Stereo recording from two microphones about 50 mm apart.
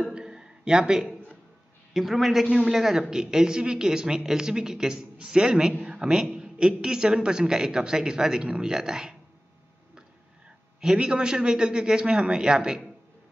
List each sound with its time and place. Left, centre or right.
0.1 s a sound: centre
2.0 s a man's voice: centre
10.8 s a woman's voice: centre